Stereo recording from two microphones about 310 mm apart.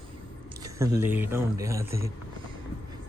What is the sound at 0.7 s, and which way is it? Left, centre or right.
Speech, centre.